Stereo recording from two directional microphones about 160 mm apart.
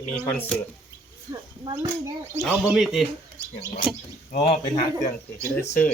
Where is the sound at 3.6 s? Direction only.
35° left (ahead or behind).